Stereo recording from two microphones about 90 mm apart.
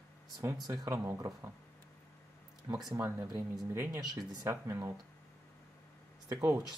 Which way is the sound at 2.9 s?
35° right (ahead or behind).